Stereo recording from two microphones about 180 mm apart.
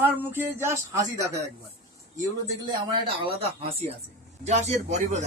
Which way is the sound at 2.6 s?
30° right (ahead or behind).